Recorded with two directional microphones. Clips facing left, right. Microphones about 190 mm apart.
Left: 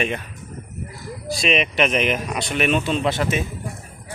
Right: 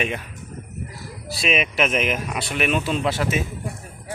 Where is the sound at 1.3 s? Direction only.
5° right (ahead or behind).